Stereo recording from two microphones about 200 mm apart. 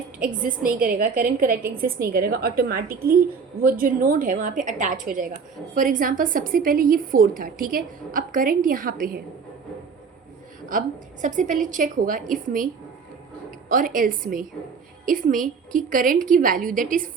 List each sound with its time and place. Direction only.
0.2 s a woman's voice: 45° right (ahead or behind)
10.7 s a woman's voice: 40° right (ahead or behind)
13.7 s a woman's voice: 45° right (ahead or behind)